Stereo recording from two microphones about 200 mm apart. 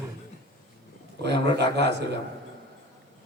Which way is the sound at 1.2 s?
55° right (ahead or behind).